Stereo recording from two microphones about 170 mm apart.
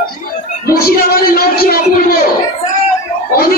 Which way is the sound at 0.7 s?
60° left (ahead or behind).